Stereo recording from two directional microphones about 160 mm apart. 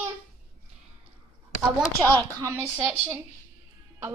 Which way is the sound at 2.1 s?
20° right (ahead or behind).